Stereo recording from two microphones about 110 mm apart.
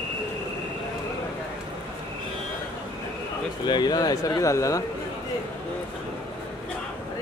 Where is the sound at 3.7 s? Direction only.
40° left (ahead or behind).